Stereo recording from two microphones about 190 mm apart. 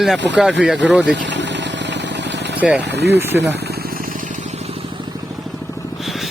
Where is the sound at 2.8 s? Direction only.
65° right (ahead or behind).